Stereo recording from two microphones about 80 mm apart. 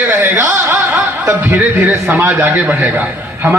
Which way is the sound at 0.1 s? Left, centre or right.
Right.